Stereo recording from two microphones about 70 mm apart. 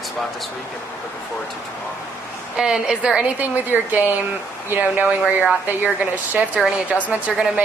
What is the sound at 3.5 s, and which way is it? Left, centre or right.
A woman's voice, right.